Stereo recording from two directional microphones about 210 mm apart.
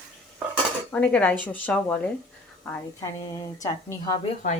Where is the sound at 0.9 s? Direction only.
5° left (ahead or behind).